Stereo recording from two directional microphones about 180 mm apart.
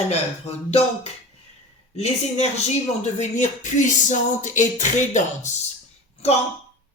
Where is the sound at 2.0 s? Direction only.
35° left (ahead or behind).